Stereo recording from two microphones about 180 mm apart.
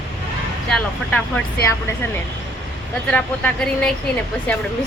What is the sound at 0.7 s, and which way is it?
Speech, 10° left (ahead or behind).